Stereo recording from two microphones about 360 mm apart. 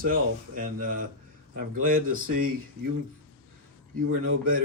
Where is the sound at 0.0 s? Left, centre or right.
Right.